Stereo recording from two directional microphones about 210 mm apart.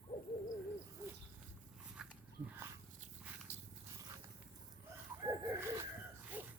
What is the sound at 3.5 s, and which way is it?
Dog, 35° right (ahead or behind).